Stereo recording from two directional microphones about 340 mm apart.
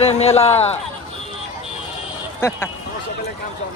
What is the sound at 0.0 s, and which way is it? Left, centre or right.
Speech, centre.